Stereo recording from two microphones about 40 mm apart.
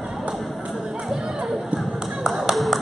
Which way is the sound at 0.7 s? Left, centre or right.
Right.